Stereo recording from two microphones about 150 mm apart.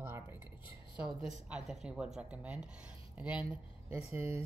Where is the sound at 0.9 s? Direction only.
5° right (ahead or behind).